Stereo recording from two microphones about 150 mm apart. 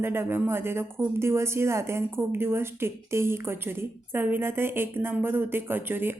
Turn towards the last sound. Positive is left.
turn(degrees=-15)  # may be behind; listen again after turning